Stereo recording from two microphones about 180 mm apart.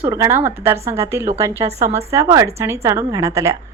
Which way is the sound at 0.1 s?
15° right (ahead or behind).